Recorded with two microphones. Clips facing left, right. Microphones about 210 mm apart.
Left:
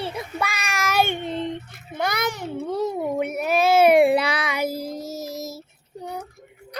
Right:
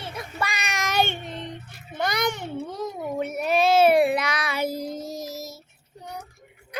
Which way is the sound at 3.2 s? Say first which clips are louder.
Right 1 dB; 10° left (ahead or behind).